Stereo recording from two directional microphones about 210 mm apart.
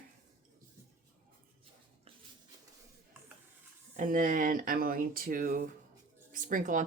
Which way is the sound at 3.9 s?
40° right (ahead or behind).